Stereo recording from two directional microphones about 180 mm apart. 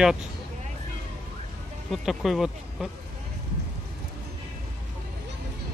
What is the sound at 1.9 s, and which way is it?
Speech, centre (ahead or behind).